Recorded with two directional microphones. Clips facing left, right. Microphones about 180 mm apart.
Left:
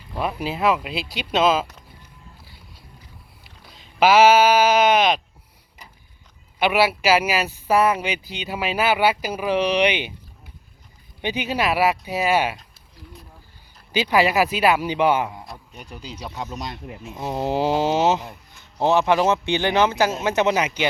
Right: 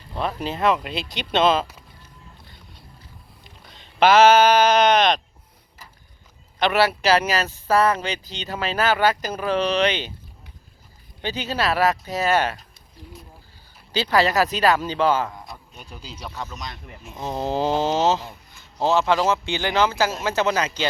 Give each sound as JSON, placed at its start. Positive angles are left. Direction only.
{"t": 0.1, "sound": "speech", "side_deg": 10}
{"t": 2.4, "sound": "boat", "side_deg": 5}
{"t": 3.4, "sound": "bleat", "side_deg": 5}
{"t": 6.6, "sound": "speech", "side_deg": 10}
{"t": 11.2, "sound": "speech", "side_deg": 15}
{"t": 13.9, "sound": "a man's voice", "side_deg": 15}